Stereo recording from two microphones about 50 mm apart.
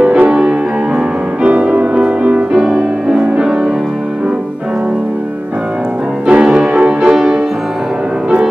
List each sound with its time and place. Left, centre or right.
0.0 s music: right
6.2 s music: centre